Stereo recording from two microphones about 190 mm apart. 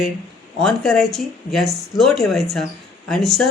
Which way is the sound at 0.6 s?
Centre (ahead or behind).